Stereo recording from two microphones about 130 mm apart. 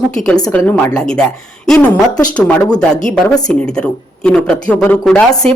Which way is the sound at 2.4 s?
10° left (ahead or behind).